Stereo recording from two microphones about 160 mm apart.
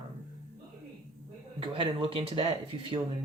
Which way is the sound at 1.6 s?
35° right (ahead or behind).